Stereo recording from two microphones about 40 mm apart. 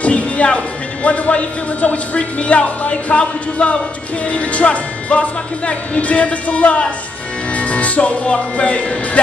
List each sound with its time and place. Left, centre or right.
0.0 s speech: left